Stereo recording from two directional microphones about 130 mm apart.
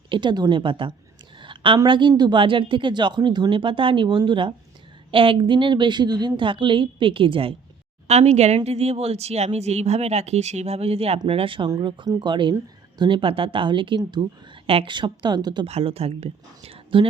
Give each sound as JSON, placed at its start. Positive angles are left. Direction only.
{"t": 0.1, "sound": "a woman's voice", "side_deg": -35}
{"t": 8.0, "sound": "a woman's voice", "side_deg": -55}
{"t": 15.6, "sound": "speech", "side_deg": -50}